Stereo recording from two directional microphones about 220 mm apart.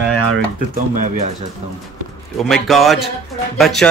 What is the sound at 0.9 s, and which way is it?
Speech, 35° right (ahead or behind).